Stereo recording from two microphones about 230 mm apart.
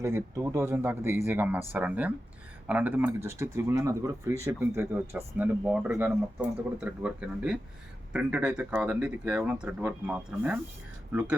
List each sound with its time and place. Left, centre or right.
0.0 s speech: centre